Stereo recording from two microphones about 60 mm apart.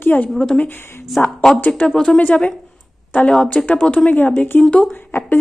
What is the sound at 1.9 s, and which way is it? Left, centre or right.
Speech, centre.